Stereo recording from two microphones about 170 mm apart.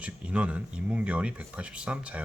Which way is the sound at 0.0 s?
5° right (ahead or behind).